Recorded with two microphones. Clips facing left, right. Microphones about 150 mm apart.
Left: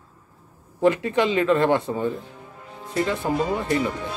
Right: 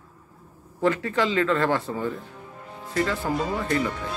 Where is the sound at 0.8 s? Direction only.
20° left (ahead or behind).